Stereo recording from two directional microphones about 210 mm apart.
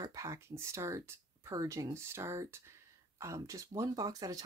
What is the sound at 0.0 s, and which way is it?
Speech, 15° right (ahead or behind).